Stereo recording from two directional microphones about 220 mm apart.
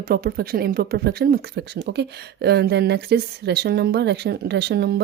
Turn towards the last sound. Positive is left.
turn(degrees=-50)  # may be behind; listen again after turning